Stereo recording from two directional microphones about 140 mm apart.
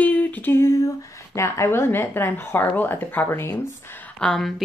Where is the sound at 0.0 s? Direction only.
10° left (ahead or behind).